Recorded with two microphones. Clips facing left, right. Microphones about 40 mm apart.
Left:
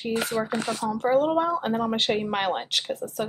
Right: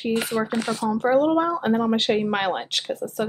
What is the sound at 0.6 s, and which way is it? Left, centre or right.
Speech, right.